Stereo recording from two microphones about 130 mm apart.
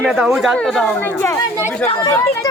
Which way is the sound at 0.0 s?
5° right (ahead or behind).